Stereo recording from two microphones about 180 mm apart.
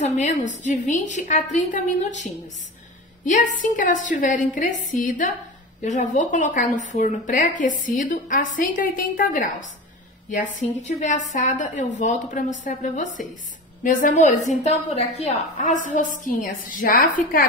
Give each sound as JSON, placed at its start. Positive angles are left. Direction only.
{"t": 0.0, "sound": "a woman's voice", "side_deg": 40}